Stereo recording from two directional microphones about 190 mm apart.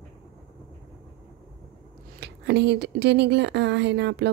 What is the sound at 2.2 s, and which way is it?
Speech, 65° right (ahead or behind).